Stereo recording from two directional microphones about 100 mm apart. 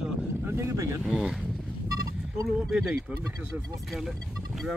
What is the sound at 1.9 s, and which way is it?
Vehicle, 35° right (ahead or behind).